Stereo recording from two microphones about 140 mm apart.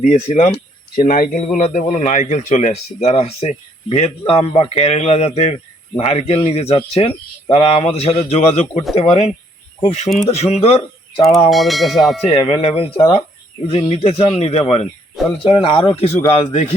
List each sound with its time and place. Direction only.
0.0 s speech: 55° left (ahead or behind)
0.9 s speech: 80° left
1.4 s speech: 60° left (ahead or behind)
11.5 s bell: centre (ahead or behind)
12.3 s speech: 45° left (ahead or behind)